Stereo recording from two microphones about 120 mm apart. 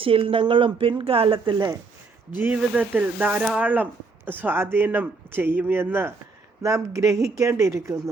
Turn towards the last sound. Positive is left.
turn(degrees=-25)  # may be behind; listen again after turning